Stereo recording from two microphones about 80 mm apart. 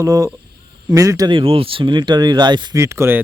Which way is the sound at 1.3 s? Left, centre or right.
Right.